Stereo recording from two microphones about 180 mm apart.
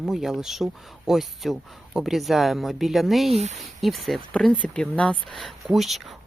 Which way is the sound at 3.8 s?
Centre (ahead or behind).